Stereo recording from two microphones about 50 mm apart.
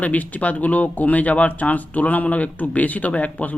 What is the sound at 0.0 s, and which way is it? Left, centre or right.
Speech, left.